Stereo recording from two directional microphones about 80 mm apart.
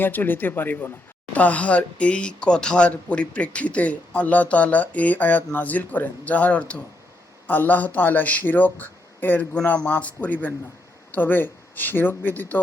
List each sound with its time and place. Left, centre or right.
0.0 s speech: left